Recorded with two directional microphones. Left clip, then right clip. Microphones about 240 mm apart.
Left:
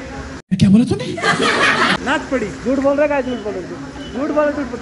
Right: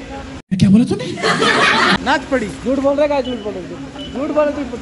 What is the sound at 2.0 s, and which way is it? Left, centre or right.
Speech, right.